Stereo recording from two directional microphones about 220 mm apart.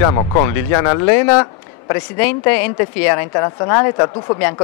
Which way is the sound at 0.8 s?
15° left (ahead or behind).